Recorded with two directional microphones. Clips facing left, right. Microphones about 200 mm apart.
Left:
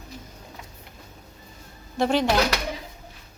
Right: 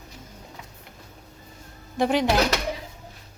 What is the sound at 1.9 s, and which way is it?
Speech, 15° right (ahead or behind).